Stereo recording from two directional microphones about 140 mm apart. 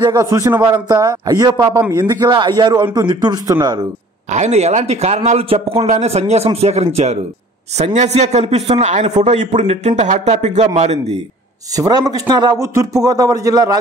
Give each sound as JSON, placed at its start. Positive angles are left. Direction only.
{"t": 0.0, "sound": "a man's voice", "side_deg": -25}
{"t": 4.3, "sound": "a man's voice", "side_deg": -55}
{"t": 11.7, "sound": "speech", "side_deg": -25}